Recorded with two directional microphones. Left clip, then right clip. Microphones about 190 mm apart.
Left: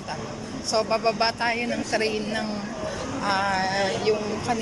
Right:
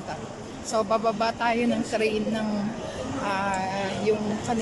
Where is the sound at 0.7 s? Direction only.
15° right (ahead or behind).